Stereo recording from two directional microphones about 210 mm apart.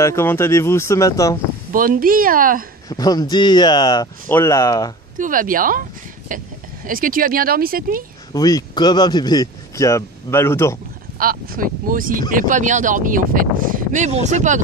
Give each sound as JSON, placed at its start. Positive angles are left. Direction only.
{"t": 0.0, "sound": "speech", "side_deg": 10}
{"t": 1.7, "sound": "speech", "side_deg": -40}
{"t": 2.9, "sound": "speech", "side_deg": 20}
{"t": 5.1, "sound": "speech", "side_deg": -40}
{"t": 8.3, "sound": "speech", "side_deg": 20}
{"t": 11.1, "sound": "speech", "side_deg": -45}